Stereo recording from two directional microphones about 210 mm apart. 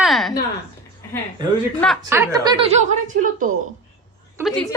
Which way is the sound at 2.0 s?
15° right (ahead or behind).